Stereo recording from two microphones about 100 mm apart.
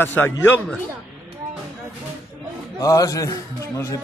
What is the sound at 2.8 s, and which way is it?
A man's voice, 35° left (ahead or behind).